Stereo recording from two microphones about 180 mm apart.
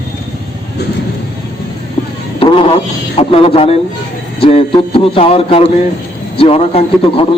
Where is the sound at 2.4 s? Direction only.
30° left (ahead or behind).